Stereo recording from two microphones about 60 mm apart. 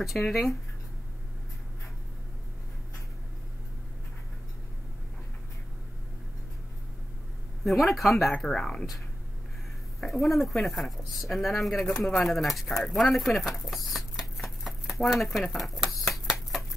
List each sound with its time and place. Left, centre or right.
0.0 s speech: centre
7.6 s speech: centre
9.9 s speech: centre
14.3 s a sound: centre